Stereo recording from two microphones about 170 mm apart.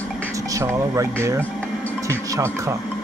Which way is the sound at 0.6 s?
15° right (ahead or behind).